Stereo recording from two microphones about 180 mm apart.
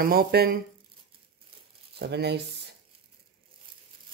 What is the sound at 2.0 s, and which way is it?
Speech, 65° right (ahead or behind).